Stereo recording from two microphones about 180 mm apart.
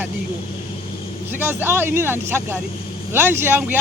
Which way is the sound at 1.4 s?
10° right (ahead or behind).